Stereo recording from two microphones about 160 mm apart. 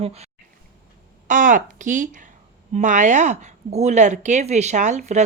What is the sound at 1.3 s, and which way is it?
Speech, 55° right (ahead or behind).